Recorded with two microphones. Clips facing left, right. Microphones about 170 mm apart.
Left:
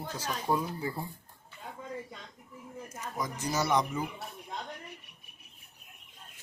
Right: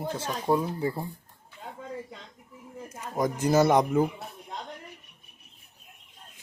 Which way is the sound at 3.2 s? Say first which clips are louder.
Right 10 dB; 55° right (ahead or behind).